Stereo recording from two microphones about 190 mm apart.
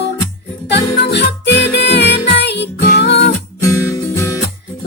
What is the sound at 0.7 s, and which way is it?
Music, 65° left (ahead or behind).